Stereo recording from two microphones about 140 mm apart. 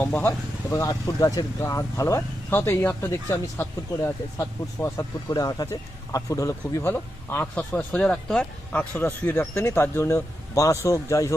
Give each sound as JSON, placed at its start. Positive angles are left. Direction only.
{"t": 0.0, "sound": "speech", "side_deg": 15}